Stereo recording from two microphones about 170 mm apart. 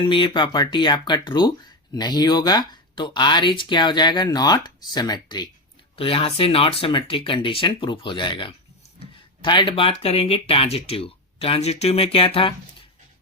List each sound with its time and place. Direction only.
0.0 s speech: 30° left (ahead or behind)